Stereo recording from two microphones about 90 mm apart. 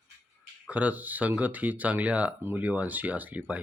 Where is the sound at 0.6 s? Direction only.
15° right (ahead or behind).